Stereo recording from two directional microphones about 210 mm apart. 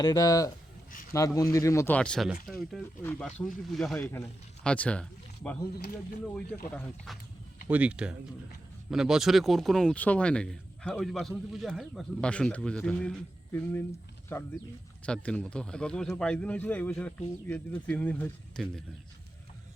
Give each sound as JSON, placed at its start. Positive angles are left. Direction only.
{"t": 0.0, "sound": "speech", "side_deg": 15}
{"t": 7.7, "sound": "speech", "side_deg": -5}